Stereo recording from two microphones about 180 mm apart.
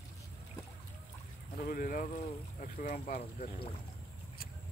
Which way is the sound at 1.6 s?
50° left (ahead or behind).